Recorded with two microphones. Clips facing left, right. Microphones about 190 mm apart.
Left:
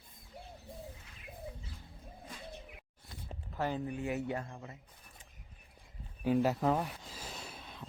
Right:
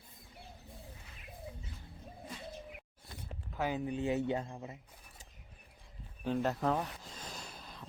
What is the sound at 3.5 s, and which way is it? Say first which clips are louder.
Speech: even; 5° right (ahead or behind).